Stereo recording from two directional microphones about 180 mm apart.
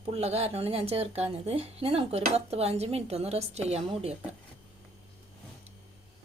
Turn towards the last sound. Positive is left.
turn(degrees=-35)  # may be behind; listen again after turning